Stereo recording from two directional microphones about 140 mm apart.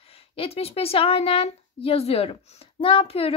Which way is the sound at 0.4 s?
45° left (ahead or behind).